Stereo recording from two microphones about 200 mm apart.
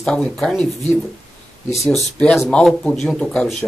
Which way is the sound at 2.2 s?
5° left (ahead or behind).